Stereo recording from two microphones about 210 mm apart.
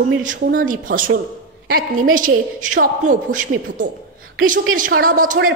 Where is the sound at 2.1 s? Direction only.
40° right (ahead or behind).